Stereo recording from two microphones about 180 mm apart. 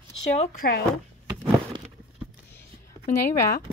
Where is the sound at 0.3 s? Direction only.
40° left (ahead or behind).